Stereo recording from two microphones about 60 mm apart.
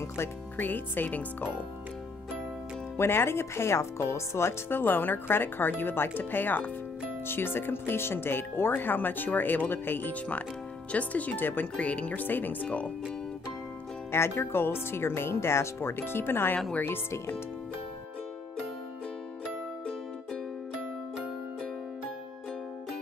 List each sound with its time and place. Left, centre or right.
0.6 s speech: left
3.0 s speech: left
4.6 s speech: left
10.9 s speech: left
11.6 s speech: left
12.6 s speech: left
14.1 s speech: left